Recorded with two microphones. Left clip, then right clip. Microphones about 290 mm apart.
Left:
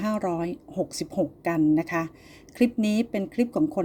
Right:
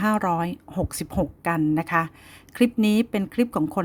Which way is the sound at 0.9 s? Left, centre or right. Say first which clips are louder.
Even; right.